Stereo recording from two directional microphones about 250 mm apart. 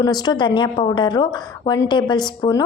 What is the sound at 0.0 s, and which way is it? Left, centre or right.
A woman's voice, centre.